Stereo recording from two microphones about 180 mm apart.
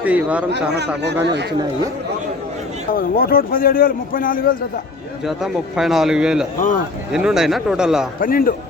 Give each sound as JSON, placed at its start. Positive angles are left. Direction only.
{"t": 0.0, "sound": "a man's voice", "side_deg": -10}
{"t": 1.0, "sound": "speech", "side_deg": -70}
{"t": 2.9, "sound": "speech", "side_deg": 55}
{"t": 5.2, "sound": "a man's voice", "side_deg": 0}
{"t": 8.2, "sound": "speech", "side_deg": 50}